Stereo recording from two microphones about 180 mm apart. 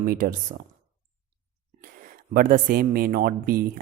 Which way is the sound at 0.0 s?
50° right (ahead or behind).